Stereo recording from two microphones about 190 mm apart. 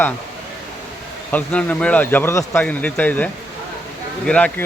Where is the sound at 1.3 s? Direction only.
5° left (ahead or behind).